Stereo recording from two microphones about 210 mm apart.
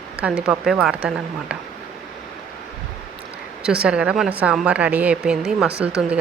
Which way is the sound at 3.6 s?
5° right (ahead or behind).